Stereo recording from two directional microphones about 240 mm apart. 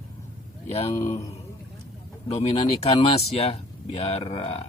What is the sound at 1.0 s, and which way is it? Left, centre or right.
Speech, left.